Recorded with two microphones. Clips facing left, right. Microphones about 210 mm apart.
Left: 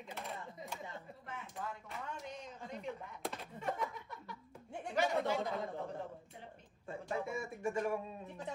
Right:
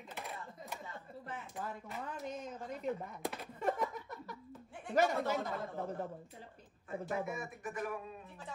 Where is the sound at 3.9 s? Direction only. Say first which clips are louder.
Right 4 dB; 45° right (ahead or behind).